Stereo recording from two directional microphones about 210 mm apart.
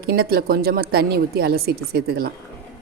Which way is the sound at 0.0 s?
50° right (ahead or behind).